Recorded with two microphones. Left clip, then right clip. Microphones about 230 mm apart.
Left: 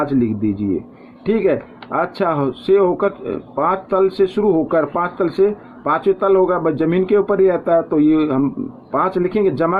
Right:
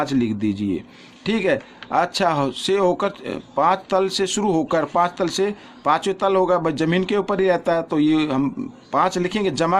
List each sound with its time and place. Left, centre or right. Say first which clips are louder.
0.0 s speech: left 3 dB; right